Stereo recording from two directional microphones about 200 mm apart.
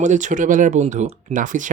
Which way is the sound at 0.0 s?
40° right (ahead or behind).